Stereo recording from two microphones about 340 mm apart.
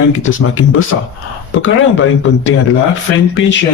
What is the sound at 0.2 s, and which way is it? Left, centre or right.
Speech, left.